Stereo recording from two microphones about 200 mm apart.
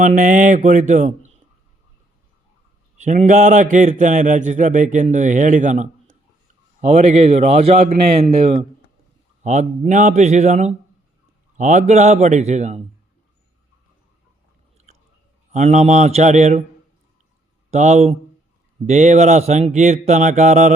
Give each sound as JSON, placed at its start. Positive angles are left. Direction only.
{"t": 0.0, "sound": "a man's voice", "side_deg": -40}
{"t": 3.0, "sound": "a man's voice", "side_deg": -35}
{"t": 15.5, "sound": "a man's voice", "side_deg": -35}
{"t": 17.7, "sound": "a man's voice", "side_deg": -35}